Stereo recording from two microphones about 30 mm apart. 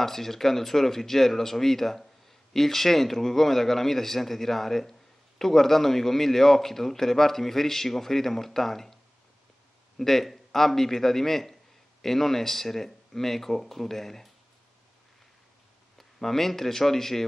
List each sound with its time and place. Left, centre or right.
0.0 s a man's voice: centre
16.0 s speech: centre